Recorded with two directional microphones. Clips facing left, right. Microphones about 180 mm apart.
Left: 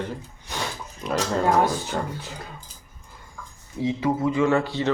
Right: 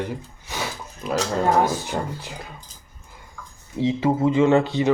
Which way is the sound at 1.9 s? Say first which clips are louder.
Right 1 dB; 20° right (ahead or behind).